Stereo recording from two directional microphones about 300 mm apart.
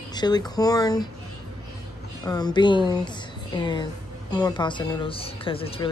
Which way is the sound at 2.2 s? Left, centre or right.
Centre.